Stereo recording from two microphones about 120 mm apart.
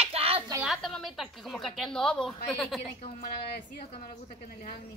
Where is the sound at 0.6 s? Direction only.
Centre (ahead or behind).